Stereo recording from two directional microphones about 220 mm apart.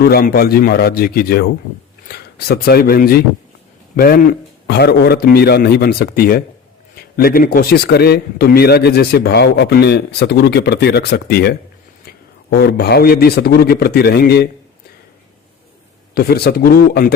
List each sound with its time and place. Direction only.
0.0 s a man's voice: 45° left (ahead or behind)
16.1 s a man's voice: 45° left (ahead or behind)